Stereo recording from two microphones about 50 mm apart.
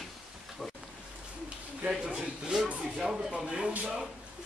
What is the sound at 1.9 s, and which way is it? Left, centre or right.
Speech, centre.